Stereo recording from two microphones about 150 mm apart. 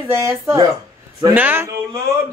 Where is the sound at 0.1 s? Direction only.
20° right (ahead or behind).